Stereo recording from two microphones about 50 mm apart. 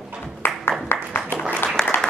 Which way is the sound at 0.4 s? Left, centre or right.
Left.